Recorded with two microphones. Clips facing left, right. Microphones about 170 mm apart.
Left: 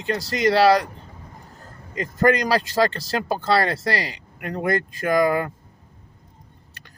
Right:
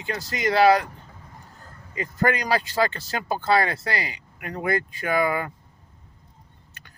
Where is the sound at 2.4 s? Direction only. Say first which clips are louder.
Left 3 dB; 40° left (ahead or behind).